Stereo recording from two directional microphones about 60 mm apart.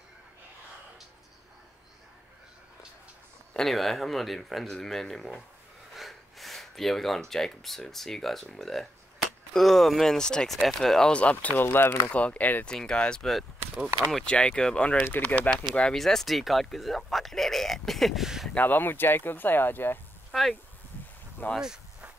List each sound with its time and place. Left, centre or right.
3.5 s speech: centre
11.1 s speech: left
11.6 s speech: left
12.1 s speech: left
12.6 s speech: centre
15.0 s speech: left
15.9 s speech: centre
18.5 s speech: left
20.2 s a sound: centre
21.4 s speech: left